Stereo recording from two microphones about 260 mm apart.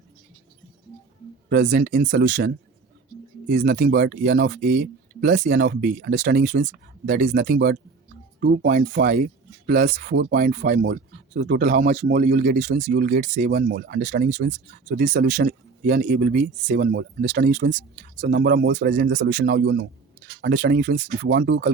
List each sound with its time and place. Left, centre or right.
1.5 s speech: right
3.5 s speech: right
14.8 s speech: right